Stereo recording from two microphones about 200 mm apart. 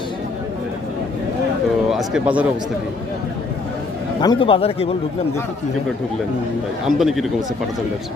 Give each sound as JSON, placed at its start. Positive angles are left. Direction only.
{"t": 1.9, "sound": "speech", "side_deg": -5}
{"t": 4.2, "sound": "a man's voice", "side_deg": 25}
{"t": 6.8, "sound": "speech", "side_deg": 0}